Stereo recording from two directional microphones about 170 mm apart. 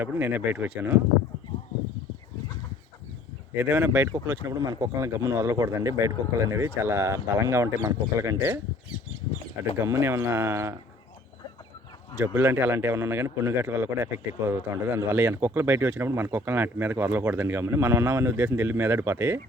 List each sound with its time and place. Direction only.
0.0 s a man's voice: 10° right (ahead or behind)
3.5 s a man's voice: 10° right (ahead or behind)
9.8 s a man's voice: 15° right (ahead or behind)
12.1 s a man's voice: 15° right (ahead or behind)